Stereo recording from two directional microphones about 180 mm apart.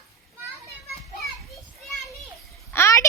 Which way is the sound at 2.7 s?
15° left (ahead or behind).